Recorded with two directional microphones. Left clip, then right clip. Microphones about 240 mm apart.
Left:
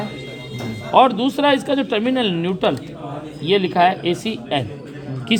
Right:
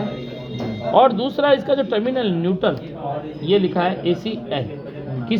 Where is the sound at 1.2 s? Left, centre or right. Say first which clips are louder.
Even; left.